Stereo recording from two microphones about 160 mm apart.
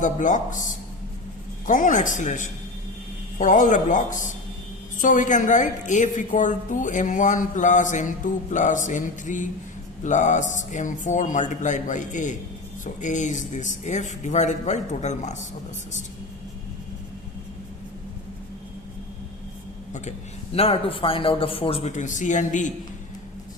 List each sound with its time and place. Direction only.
0.0 s a woman's voice: 50° left (ahead or behind)
19.9 s a man's voice: 45° left (ahead or behind)